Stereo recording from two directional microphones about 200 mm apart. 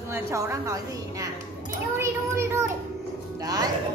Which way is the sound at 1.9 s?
15° right (ahead or behind).